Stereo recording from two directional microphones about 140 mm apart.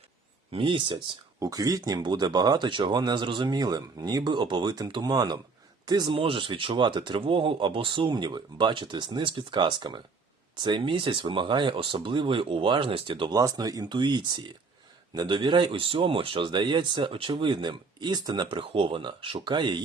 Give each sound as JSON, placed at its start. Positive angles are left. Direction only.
{"t": 0.5, "sound": "speech", "side_deg": -35}